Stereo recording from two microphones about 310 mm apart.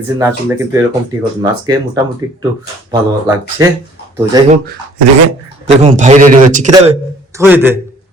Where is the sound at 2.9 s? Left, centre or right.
Centre.